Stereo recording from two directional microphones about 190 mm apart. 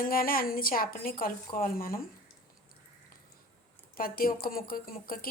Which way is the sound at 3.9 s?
50° left (ahead or behind).